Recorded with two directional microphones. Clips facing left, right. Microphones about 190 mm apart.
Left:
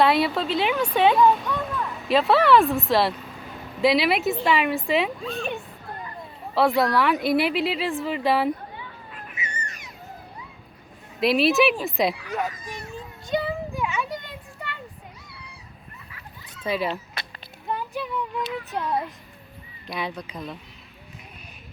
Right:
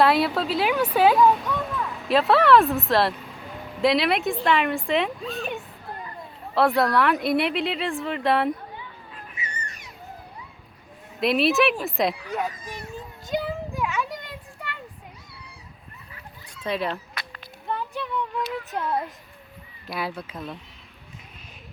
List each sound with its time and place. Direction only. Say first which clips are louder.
0.0 s speech: even; centre (ahead or behind)
6.5 s speech: even; centre (ahead or behind)
9.3 s cat: left 2 dB; 35° right (ahead or behind)
11.2 s speech: left 1 dB; centre (ahead or behind)
12.9 s a sound: left 2 dB; centre (ahead or behind)
16.6 s speech: left 1 dB; 5° left (ahead or behind)
16.9 s a sound: left 1 dB; 25° left (ahead or behind)
17.7 s a sound: even; 5° left (ahead or behind)
18.7 s speech: left 2 dB; centre (ahead or behind)